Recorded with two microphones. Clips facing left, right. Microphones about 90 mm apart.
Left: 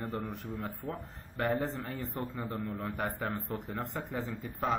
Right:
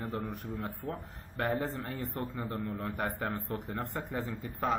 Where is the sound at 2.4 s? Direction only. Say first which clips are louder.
Even; 15° left (ahead or behind).